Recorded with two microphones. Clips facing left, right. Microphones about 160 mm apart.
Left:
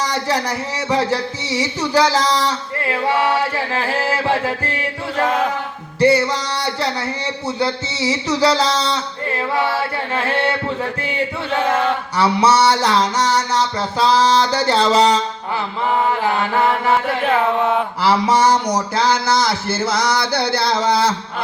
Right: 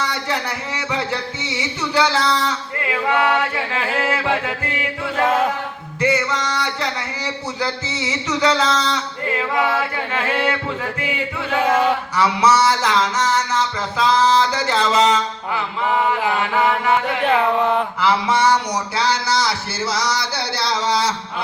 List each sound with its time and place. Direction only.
0.0 s speech: 40° left (ahead or behind)
0.9 s music: 40° left (ahead or behind)
5.2 s a sound: 5° right (ahead or behind)
6.0 s music: 35° left (ahead or behind)
12.1 s music: 30° left (ahead or behind)
17.2 s a sound: centre (ahead or behind)
18.0 s speech: 40° left (ahead or behind); by 21.2 s 55° left (ahead or behind)